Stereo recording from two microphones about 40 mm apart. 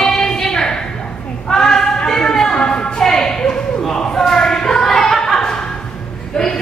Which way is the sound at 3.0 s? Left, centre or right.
Centre.